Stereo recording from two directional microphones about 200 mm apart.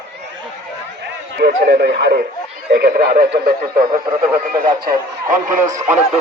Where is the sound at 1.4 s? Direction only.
50° right (ahead or behind).